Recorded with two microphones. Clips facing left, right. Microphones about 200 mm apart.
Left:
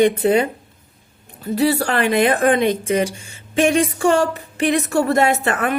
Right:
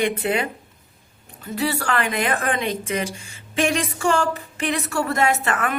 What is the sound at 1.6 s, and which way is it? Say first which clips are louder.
A woman's voice: left 6 dB; 35° left (ahead or behind).